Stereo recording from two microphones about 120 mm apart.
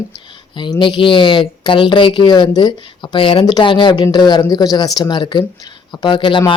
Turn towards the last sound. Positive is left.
turn(degrees=40)  # may be behind; listen again after turning